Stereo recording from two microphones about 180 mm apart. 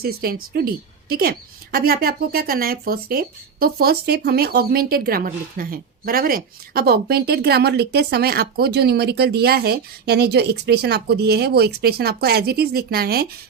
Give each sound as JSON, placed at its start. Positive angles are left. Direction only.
{"t": 0.0, "sound": "a woman's voice", "side_deg": -55}